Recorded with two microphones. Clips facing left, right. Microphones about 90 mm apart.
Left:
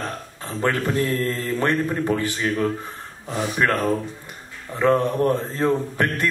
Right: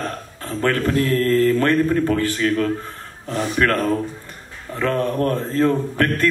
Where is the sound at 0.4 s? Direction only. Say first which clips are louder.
Right 3 dB; 15° left (ahead or behind).